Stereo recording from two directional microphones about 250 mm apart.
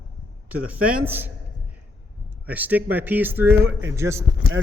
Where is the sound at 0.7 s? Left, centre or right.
Centre.